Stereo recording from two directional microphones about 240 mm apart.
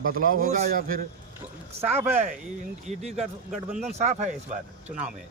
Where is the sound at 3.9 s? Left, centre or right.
Right.